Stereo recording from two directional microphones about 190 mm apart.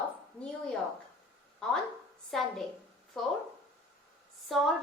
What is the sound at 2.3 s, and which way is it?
Speech, centre (ahead or behind).